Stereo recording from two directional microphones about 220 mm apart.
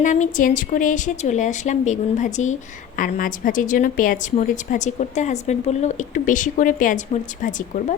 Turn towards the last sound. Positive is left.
turn(degrees=35)  # may be behind; listen again after turning